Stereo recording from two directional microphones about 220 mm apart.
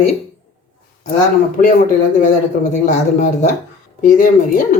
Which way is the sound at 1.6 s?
40° left (ahead or behind).